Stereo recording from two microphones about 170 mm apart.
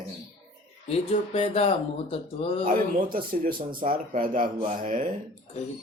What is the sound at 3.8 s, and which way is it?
Speech, 55° right (ahead or behind).